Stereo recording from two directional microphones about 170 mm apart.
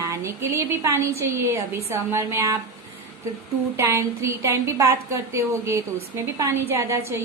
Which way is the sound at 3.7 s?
15° right (ahead or behind).